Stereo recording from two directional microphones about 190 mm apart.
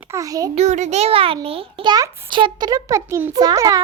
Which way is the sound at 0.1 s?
15° right (ahead or behind).